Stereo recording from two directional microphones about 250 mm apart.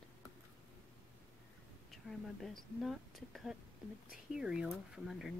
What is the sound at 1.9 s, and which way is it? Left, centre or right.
Speech, centre.